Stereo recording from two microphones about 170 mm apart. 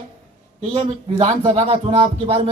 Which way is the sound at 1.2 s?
25° right (ahead or behind).